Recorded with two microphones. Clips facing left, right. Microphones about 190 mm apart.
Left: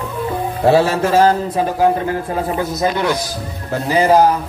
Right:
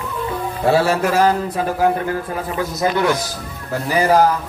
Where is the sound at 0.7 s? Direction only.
20° left (ahead or behind).